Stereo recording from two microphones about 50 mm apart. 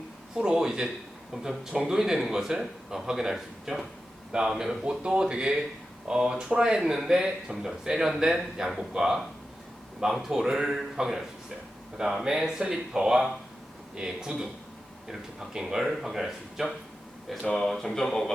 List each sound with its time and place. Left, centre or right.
0.3 s speech: centre
17.4 s speech: centre